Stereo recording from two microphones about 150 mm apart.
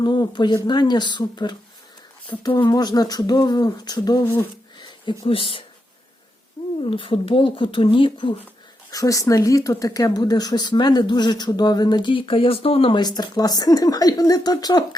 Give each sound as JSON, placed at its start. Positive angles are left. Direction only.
{"t": 0.0, "sound": "speech", "side_deg": 30}
{"t": 6.8, "sound": "speech", "side_deg": 35}
{"t": 8.9, "sound": "speech", "side_deg": 20}